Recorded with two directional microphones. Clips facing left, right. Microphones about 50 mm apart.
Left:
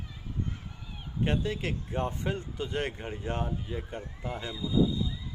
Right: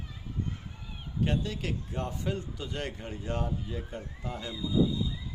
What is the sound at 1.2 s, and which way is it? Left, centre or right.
Speech, left.